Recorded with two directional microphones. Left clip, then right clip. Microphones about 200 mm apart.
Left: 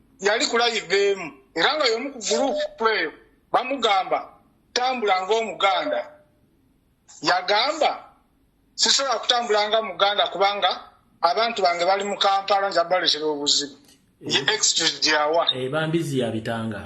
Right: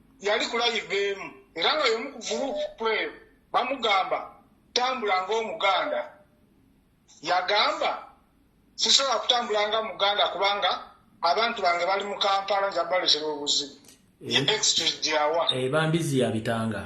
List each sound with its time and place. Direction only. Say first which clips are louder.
0.3 s speech: left 5 dB; 35° left (ahead or behind)
7.2 s speech: left 3 dB; 35° left (ahead or behind)
15.5 s speech: left 1 dB; 5° right (ahead or behind)